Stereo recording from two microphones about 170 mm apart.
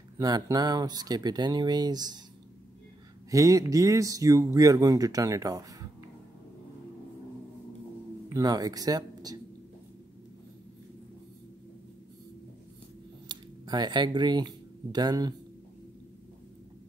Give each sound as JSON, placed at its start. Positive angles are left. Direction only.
{"t": 0.2, "sound": "speech", "side_deg": -20}
{"t": 3.3, "sound": "speech", "side_deg": -20}
{"t": 8.3, "sound": "speech", "side_deg": -20}
{"t": 13.3, "sound": "speech", "side_deg": -25}